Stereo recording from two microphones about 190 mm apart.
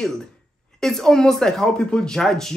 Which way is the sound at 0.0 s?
5° left (ahead or behind).